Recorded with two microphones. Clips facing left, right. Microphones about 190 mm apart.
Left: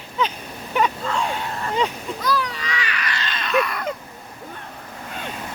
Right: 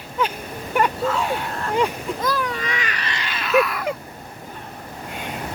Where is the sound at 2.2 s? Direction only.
50° right (ahead or behind).